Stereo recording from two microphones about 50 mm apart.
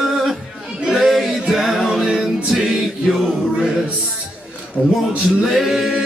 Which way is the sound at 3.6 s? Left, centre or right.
Centre.